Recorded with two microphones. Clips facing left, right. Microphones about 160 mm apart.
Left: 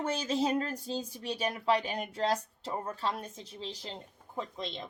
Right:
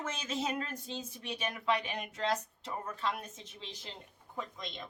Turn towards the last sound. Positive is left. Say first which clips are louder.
# left 4 dB
turn(degrees=30)  # may be behind; listen again after turning